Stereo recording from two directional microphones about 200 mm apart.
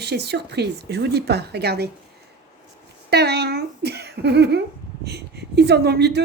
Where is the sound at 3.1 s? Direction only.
55° right (ahead or behind).